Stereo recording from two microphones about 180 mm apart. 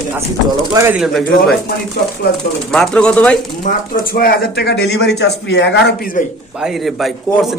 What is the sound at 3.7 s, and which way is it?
Speech, 55° left (ahead or behind).